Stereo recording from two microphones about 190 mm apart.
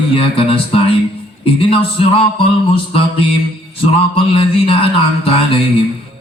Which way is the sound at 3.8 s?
30° left (ahead or behind).